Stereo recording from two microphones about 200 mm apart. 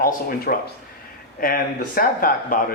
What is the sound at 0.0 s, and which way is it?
Speech, 50° left (ahead or behind).